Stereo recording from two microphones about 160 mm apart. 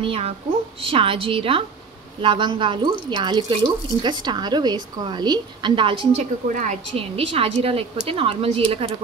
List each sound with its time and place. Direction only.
0.0 s a woman's voice: 35° right (ahead or behind)
6.4 s a woman's voice: 55° right (ahead or behind)
7.0 s a woman's voice: 35° right (ahead or behind)